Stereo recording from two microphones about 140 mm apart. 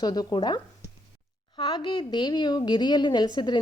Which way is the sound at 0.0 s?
30° left (ahead or behind).